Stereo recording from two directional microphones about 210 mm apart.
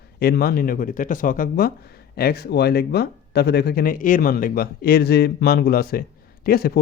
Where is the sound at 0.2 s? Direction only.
45° left (ahead or behind).